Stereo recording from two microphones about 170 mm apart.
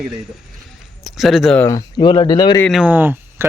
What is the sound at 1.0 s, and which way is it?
Speech, centre (ahead or behind).